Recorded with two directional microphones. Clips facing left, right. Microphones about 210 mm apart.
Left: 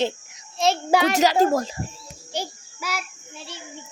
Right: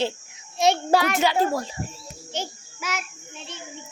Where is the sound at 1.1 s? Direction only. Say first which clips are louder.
Left 4 dB; 40° left (ahead or behind).